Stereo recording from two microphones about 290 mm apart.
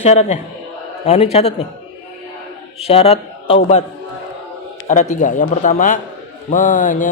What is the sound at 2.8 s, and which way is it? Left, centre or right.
Speech, left.